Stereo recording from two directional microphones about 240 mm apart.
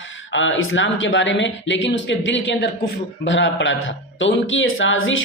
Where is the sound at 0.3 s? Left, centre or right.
Left.